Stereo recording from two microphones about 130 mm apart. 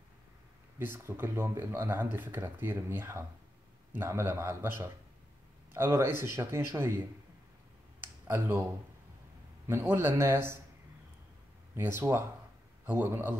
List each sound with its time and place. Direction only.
0.7 s a man's voice: 15° right (ahead or behind)
8.0 s a sound: 15° right (ahead or behind)
9.7 s speech: 20° right (ahead or behind)
11.7 s a man's voice: 20° right (ahead or behind)